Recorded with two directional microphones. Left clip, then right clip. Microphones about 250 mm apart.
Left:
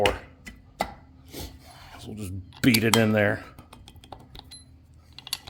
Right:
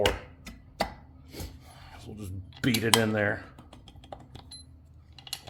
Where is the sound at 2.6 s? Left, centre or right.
Left.